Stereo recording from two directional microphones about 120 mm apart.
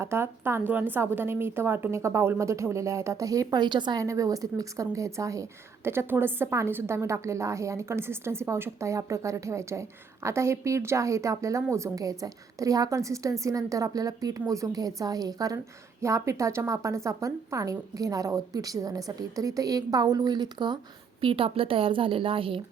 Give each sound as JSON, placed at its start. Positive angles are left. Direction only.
{"t": 0.0, "sound": "a woman's voice", "side_deg": -20}
{"t": 4.0, "sound": "a woman's voice", "side_deg": -30}
{"t": 21.2, "sound": "a woman's voice", "side_deg": -50}